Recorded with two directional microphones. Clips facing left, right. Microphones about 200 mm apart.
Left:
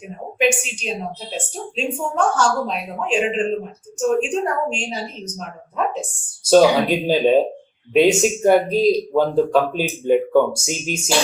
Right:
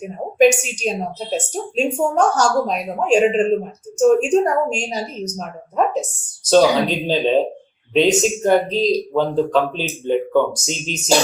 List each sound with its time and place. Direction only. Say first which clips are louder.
0.3 s a woman's voice: right 6 dB; 40° right (ahead or behind)
6.4 s speech: left 1 dB; 10° left (ahead or behind)